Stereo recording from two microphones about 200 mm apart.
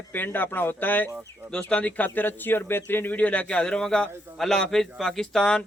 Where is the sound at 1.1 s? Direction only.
15° right (ahead or behind).